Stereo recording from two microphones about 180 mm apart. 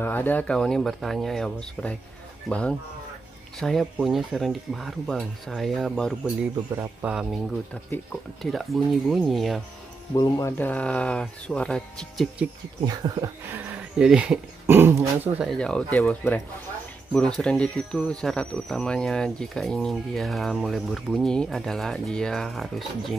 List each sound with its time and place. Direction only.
0.0 s speech: 10° left (ahead or behind)
3.5 s speech: centre (ahead or behind)
6.8 s speech: 10° right (ahead or behind)
10.1 s speech: 20° left (ahead or behind); by 12.4 s centre (ahead or behind)
12.8 s speech: 20° right (ahead or behind)
13.7 s speech: 5° right (ahead or behind)
15.4 s speech: 5° left (ahead or behind)